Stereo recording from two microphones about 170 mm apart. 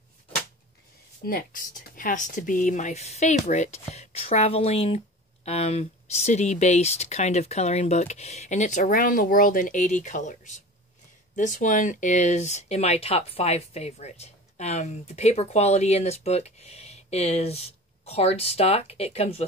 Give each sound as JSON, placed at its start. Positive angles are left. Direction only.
{"t": 1.2, "sound": "speech", "side_deg": 60}